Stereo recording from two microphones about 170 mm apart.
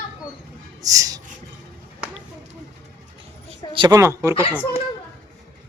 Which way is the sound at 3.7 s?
30° right (ahead or behind).